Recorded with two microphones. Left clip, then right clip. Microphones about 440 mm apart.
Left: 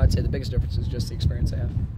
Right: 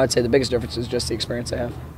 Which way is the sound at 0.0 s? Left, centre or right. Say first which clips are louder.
Right 13 dB; right.